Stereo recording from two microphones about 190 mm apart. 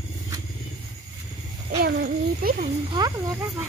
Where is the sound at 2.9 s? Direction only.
20° right (ahead or behind).